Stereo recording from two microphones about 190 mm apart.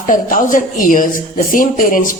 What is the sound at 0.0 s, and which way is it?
A woman's voice, 45° left (ahead or behind).